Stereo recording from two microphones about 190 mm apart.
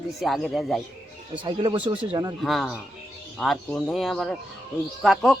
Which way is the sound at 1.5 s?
25° right (ahead or behind).